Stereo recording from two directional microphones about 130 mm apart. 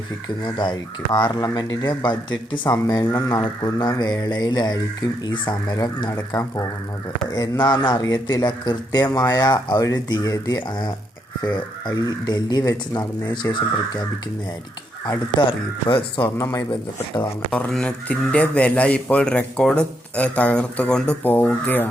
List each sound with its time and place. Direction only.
0.4 s speech: 35° left (ahead or behind)
2.6 s speech: 25° left (ahead or behind)
7.9 s speech: 30° left (ahead or behind)
15.4 s speech: 35° left (ahead or behind)
16.4 s speech: 25° left (ahead or behind)
17.5 s speech: 5° left (ahead or behind)